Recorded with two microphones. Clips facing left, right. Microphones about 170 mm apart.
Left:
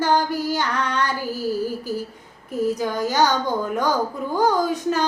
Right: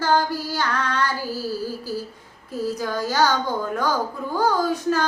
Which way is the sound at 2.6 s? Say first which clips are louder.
Left 3 dB; 20° left (ahead or behind).